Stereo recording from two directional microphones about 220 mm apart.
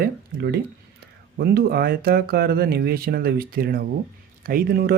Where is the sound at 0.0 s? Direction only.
45° right (ahead or behind).